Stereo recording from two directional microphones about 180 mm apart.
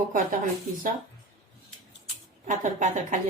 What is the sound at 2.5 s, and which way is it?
Speech, 45° right (ahead or behind).